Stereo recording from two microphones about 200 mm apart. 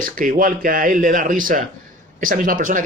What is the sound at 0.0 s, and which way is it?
A man's voice, 45° right (ahead or behind).